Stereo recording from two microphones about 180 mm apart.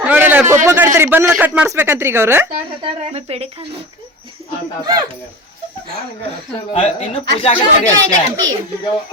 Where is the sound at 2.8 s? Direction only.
35° right (ahead or behind).